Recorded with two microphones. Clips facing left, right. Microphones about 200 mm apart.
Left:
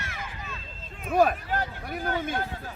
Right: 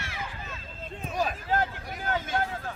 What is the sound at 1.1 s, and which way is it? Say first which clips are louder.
Speech: left 9 dB; 55° left (ahead or behind).